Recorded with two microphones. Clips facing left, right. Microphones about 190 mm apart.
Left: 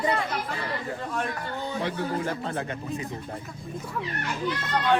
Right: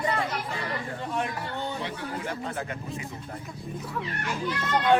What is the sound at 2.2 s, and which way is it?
Speech, 30° left (ahead or behind).